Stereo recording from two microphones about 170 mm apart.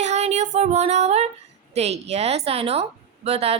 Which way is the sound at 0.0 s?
40° right (ahead or behind).